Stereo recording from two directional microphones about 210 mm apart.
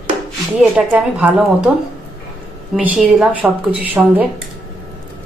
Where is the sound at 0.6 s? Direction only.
5° right (ahead or behind).